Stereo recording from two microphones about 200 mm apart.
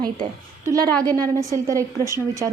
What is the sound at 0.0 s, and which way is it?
A woman's voice, 20° right (ahead or behind).